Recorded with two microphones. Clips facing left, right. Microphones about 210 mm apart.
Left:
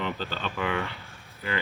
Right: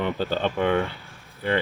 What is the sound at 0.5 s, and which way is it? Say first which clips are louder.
Speech: right 6 dB; 40° right (ahead or behind).